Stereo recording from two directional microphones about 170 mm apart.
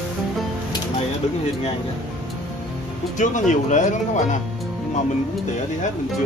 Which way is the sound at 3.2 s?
45° left (ahead or behind).